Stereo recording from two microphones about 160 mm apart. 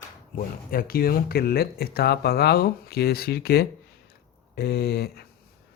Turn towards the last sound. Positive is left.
turn(degrees=80)